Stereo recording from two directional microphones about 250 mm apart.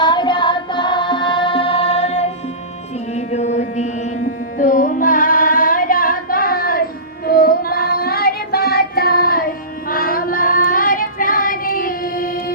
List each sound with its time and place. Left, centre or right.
0.0 s music: centre
3.2 s mantra: left
4.5 s music: left
7.3 s child singing: left